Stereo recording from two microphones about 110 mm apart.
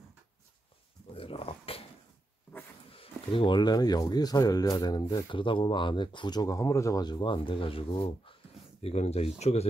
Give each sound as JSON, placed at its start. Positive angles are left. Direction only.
{"t": 1.1, "sound": "dog", "side_deg": 60}
{"t": 2.9, "sound": "speech", "side_deg": 55}
{"t": 5.3, "sound": "speech", "side_deg": 50}
{"t": 8.8, "sound": "speech", "side_deg": 75}